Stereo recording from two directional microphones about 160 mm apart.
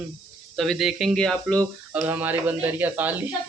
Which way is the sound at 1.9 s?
10° right (ahead or behind).